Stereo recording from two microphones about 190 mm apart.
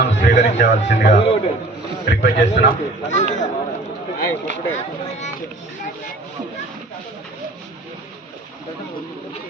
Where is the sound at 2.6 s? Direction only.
45° left (ahead or behind).